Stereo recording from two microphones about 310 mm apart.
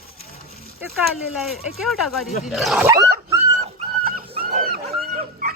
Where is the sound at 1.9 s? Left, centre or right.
Centre.